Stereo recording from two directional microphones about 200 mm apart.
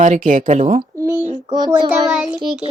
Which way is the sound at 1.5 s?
20° right (ahead or behind).